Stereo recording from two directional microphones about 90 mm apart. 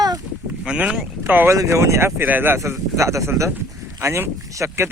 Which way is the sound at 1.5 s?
35° right (ahead or behind).